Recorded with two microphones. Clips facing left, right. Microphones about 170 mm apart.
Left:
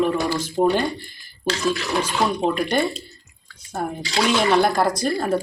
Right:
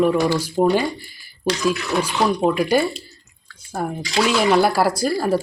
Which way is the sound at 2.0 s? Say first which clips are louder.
Right 4 dB; 5° right (ahead or behind).